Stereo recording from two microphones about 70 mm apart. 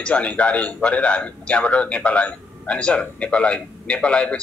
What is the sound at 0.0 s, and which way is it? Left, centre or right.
A man's voice, centre.